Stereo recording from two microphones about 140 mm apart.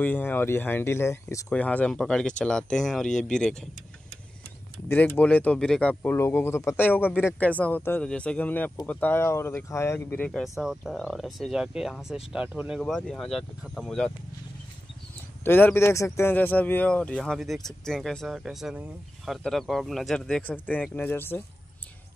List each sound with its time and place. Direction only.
0.0 s speech: 10° left (ahead or behind)
4.8 s speech: 15° left (ahead or behind)
10.4 s speech: 5° right (ahead or behind)
15.4 s speech: 15° left (ahead or behind)